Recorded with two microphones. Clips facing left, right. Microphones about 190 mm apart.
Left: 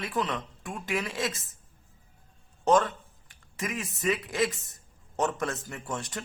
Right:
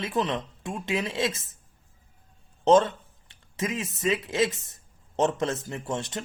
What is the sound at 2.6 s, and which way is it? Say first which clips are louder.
Speech: right 4 dB; 25° right (ahead or behind).